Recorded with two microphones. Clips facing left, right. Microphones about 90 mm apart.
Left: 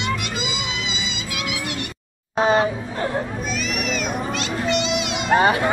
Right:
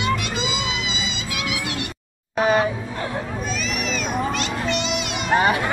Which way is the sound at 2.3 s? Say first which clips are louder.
Left 1 dB; 30° left (ahead or behind).